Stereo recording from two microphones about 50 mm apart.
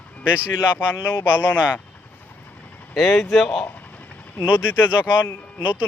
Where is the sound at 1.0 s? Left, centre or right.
Left.